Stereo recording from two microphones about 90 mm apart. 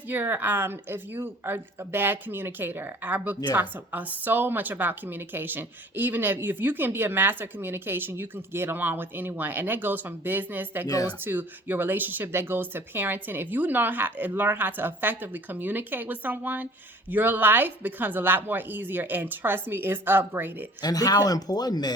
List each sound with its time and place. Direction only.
0.1 s a woman's voice: 25° right (ahead or behind)
10.8 s speech: 45° left (ahead or behind)
11.2 s a woman's voice: 20° right (ahead or behind)
20.8 s speech: 45° left (ahead or behind)